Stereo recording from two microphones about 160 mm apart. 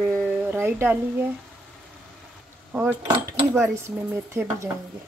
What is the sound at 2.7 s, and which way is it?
Cutlery, 10° right (ahead or behind).